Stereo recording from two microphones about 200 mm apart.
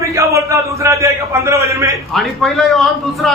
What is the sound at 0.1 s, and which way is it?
A man's voice, 15° right (ahead or behind).